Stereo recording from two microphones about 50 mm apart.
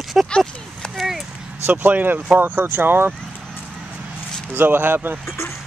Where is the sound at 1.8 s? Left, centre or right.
Right.